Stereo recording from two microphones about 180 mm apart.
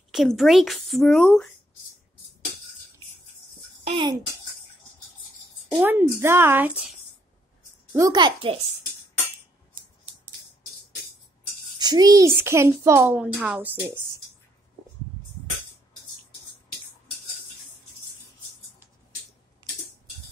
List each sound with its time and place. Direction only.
0.1 s speech: centre (ahead or behind)
3.8 s a child's voice: 30° right (ahead or behind)
5.8 s a child's voice: 10° right (ahead or behind)
7.9 s a child's voice: 20° right (ahead or behind)
11.8 s a child's voice: 20° right (ahead or behind)